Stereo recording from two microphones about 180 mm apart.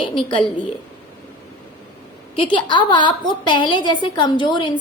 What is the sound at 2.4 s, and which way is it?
A woman's voice, 25° left (ahead or behind).